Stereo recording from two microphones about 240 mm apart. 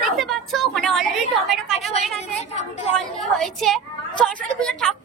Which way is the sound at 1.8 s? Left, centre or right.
Left.